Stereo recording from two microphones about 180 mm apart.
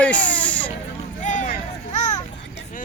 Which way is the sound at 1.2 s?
45° left (ahead or behind).